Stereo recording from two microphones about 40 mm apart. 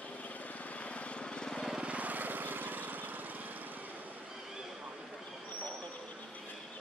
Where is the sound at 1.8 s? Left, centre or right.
Right.